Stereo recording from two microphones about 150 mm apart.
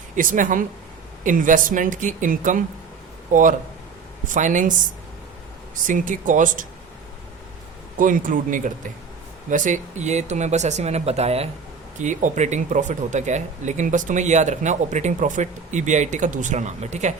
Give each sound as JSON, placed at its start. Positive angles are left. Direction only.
{"t": 0.2, "sound": "speech", "side_deg": -60}
{"t": 5.7, "sound": "speech", "side_deg": -60}
{"t": 7.9, "sound": "speech", "side_deg": -65}
{"t": 11.9, "sound": "speech", "side_deg": -55}